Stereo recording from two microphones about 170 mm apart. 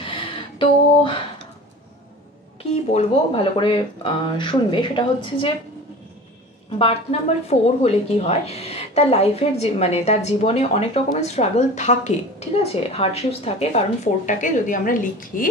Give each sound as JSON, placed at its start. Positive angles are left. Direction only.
{"t": 0.0, "sound": "a sound", "side_deg": 30}
{"t": 2.7, "sound": "speech", "side_deg": 40}
{"t": 6.8, "sound": "speech", "side_deg": 35}